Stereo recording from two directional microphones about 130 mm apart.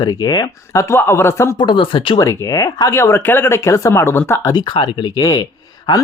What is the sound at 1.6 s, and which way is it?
Speech, 40° left (ahead or behind).